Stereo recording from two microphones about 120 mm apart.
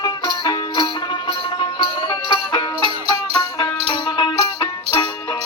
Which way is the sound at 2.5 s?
35° left (ahead or behind).